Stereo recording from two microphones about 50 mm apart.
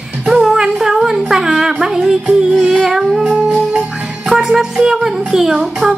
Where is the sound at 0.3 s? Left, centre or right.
Centre.